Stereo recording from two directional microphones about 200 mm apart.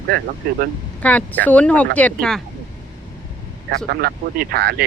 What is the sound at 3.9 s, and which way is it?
Speech, 50° right (ahead or behind).